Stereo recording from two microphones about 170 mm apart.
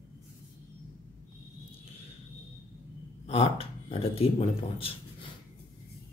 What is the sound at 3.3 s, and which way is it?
Speech, 35° left (ahead or behind).